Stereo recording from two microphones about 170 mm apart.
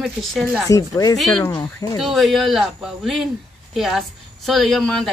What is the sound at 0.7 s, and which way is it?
Speech, 20° left (ahead or behind).